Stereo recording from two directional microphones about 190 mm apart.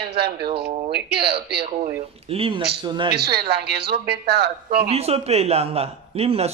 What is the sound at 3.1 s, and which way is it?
A man's voice, 55° right (ahead or behind).